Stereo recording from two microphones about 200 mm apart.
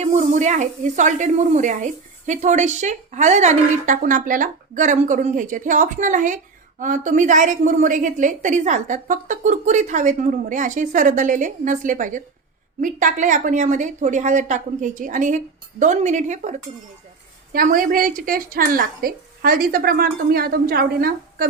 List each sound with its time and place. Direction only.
0.0 s a woman's voice: 35° right (ahead or behind)